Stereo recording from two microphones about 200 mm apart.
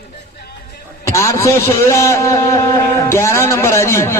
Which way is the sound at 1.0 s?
15° left (ahead or behind).